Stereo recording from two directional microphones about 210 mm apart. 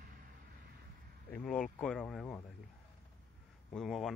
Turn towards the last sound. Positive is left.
turn(degrees=0)  # may be behind; listen again after turning